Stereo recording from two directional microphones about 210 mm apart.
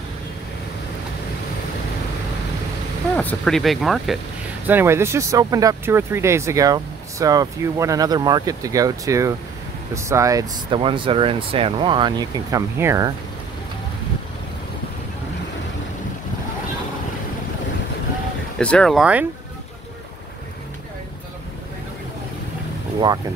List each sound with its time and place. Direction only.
3.2 s speech: 5° left (ahead or behind); by 13.1 s 15° right (ahead or behind)
18.6 s speech: 5° left (ahead or behind)